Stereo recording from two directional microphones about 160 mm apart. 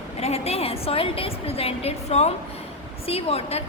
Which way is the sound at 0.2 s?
40° left (ahead or behind).